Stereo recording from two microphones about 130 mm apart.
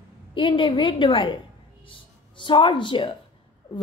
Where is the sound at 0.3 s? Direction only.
40° left (ahead or behind).